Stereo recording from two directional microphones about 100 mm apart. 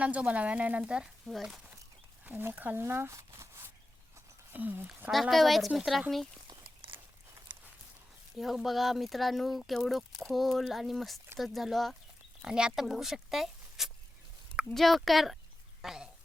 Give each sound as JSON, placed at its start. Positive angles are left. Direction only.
{"t": 0.0, "sound": "speech", "side_deg": -15}
{"t": 2.2, "sound": "speech", "side_deg": -20}
{"t": 5.1, "sound": "speech", "side_deg": 0}
{"t": 6.7, "sound": "walk", "side_deg": -60}
{"t": 8.4, "sound": "speech", "side_deg": 0}
{"t": 15.8, "sound": "a sound", "side_deg": -5}